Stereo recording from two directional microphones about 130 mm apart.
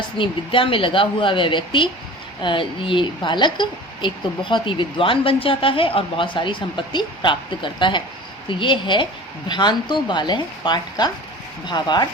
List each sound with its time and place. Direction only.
0.2 s a woman's voice: 45° left (ahead or behind)